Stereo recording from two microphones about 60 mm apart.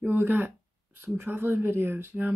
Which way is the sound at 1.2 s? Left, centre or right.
Right.